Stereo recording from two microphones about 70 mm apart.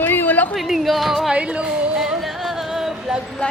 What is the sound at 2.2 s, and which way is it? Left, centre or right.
Music, centre.